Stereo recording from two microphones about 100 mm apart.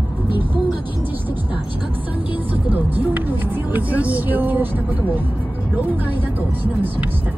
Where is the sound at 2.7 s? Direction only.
15° right (ahead or behind).